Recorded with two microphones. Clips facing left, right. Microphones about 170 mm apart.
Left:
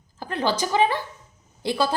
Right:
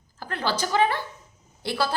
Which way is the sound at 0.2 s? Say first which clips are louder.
Left 4 dB; 20° left (ahead or behind).